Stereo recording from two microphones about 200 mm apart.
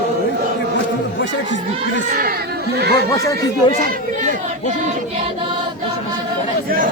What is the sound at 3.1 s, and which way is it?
Speech, 15° left (ahead or behind).